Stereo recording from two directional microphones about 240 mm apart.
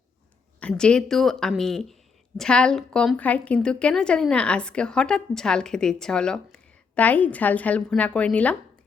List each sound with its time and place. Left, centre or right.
0.6 s a woman's voice: centre